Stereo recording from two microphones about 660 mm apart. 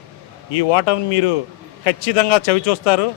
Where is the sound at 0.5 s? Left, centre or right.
Left.